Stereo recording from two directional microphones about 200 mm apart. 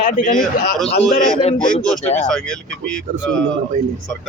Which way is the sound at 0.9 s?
30° left (ahead or behind).